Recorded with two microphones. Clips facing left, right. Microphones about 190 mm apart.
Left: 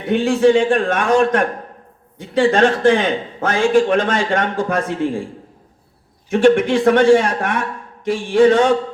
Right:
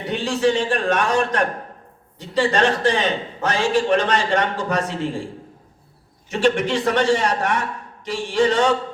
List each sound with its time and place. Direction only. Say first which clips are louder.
0.0 s a man's voice: left 6 dB; 55° left (ahead or behind)
6.3 s a man's voice: left 6 dB; 55° left (ahead or behind)